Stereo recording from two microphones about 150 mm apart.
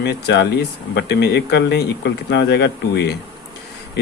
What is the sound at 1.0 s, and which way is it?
Speech, 90° left.